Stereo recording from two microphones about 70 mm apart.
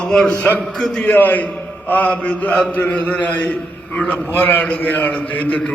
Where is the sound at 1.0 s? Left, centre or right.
Left.